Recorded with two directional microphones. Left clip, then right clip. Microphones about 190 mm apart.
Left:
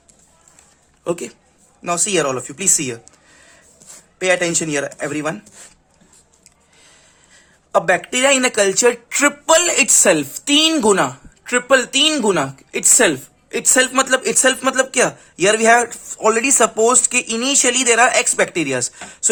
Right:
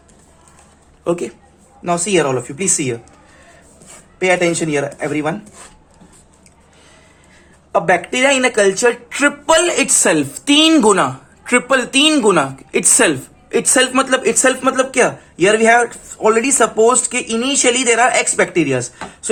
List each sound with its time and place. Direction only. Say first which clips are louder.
1.0 s speech: right 4 dB; 30° left (ahead or behind)
1.8 s speech: right 3 dB; 40° left (ahead or behind)
4.2 s speech: right 2 dB; 40° left (ahead or behind)
7.7 s speech: right 1 dB; 35° left (ahead or behind)